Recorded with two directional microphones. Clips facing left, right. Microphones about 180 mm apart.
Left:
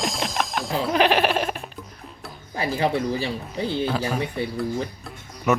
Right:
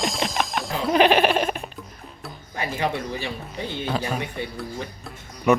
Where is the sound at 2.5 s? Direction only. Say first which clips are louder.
Left 3 dB; 35° left (ahead or behind).